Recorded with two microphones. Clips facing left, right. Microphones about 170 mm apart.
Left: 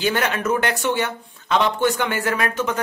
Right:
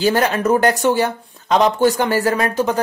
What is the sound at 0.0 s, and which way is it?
Speech, 35° right (ahead or behind).